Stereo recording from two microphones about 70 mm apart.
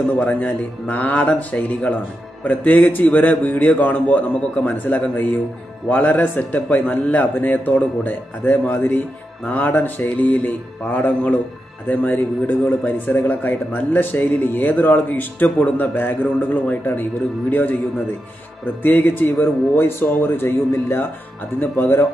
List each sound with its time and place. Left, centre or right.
0.2 s speech: left
18.8 s speech: left